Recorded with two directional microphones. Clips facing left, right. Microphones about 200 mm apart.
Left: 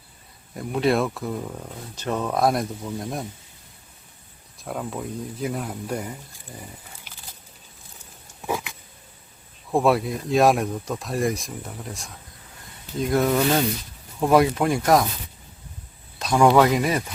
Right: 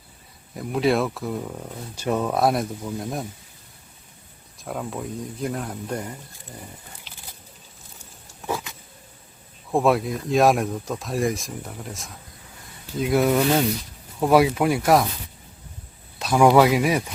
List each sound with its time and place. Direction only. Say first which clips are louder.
0.5 s speech: even; centre (ahead or behind)
4.5 s speech: even; centre (ahead or behind)
8.4 s vehicle: left 1 dB; 10° left (ahead or behind)
9.7 s speech: even; centre (ahead or behind)
16.1 s speech: right 1 dB; 5° right (ahead or behind)